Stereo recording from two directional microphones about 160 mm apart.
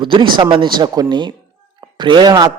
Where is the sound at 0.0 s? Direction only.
30° right (ahead or behind).